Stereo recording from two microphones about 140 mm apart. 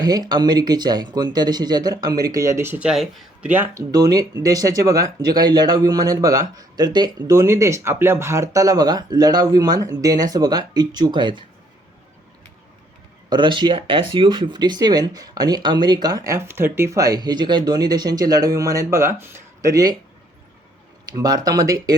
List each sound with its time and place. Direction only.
0.0 s speech: 30° right (ahead or behind); by 3.5 s centre (ahead or behind)
3.5 s speech: 15° right (ahead or behind)
3.9 s speech: 25° right (ahead or behind)
13.3 s speech: 35° right (ahead or behind)
21.1 s speech: 25° right (ahead or behind)